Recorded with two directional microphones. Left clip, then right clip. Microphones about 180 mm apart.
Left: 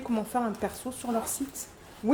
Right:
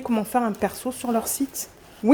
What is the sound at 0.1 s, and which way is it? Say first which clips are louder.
Speech: right 6 dB; 50° right (ahead or behind).